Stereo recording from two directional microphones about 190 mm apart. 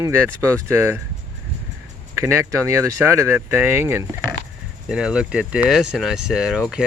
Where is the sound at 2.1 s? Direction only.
15° right (ahead or behind).